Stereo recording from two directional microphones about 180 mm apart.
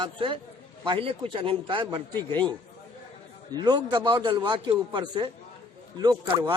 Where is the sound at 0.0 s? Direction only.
30° right (ahead or behind).